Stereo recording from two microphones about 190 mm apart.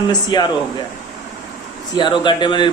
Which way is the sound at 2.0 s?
25° left (ahead or behind).